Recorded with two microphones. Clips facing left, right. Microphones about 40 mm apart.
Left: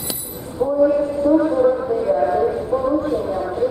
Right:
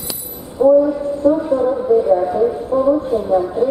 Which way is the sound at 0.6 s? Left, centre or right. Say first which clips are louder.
Right 9 dB; right.